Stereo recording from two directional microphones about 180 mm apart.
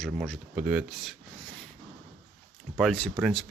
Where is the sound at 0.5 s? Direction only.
10° right (ahead or behind).